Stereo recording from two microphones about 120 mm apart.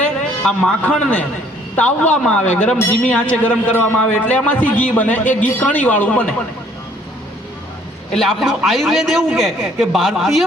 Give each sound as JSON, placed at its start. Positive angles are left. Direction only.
{"t": 0.0, "sound": "a man's voice", "side_deg": 10}
{"t": 8.1, "sound": "a man's voice", "side_deg": 5}